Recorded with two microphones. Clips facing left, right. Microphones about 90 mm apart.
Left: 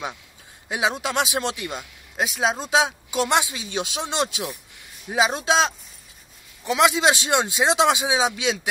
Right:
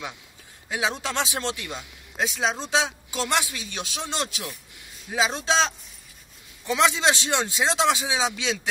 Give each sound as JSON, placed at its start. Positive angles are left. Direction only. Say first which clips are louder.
{"t": 0.7, "sound": "speech", "louder": "left 3 dB", "side_deg": 15}